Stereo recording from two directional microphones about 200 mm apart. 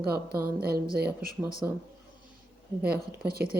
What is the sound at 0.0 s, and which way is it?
Speech, 50° right (ahead or behind).